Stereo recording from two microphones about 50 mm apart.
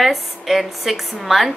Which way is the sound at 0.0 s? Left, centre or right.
Centre.